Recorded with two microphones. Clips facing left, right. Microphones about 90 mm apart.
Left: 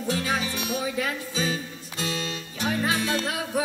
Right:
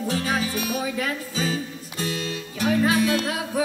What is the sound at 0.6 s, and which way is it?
Music, 30° left (ahead or behind).